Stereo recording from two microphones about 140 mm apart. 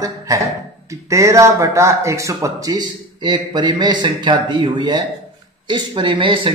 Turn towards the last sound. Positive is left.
turn(degrees=-35)  # may be behind; listen again after turning